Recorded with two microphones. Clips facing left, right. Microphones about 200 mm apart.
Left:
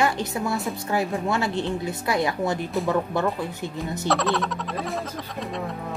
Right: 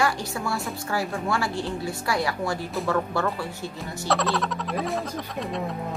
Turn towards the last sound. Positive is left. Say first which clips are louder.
# right 1 dB
turn(degrees=0)  # may be behind; listen again after turning